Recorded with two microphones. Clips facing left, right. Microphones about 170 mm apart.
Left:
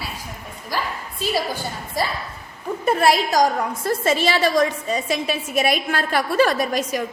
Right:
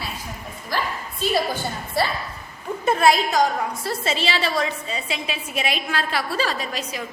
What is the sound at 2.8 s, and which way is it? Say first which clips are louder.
A woman's voice: even; 35° left (ahead or behind).